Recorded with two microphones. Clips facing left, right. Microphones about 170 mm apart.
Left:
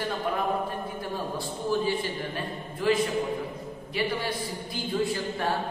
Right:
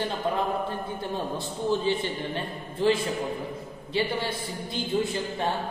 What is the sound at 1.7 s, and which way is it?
A man's voice, 25° right (ahead or behind).